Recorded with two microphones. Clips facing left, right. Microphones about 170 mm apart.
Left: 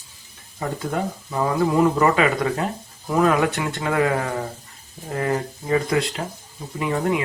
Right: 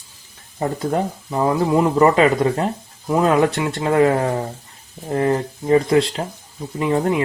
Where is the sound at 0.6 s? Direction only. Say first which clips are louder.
Right 5 dB; 30° right (ahead or behind).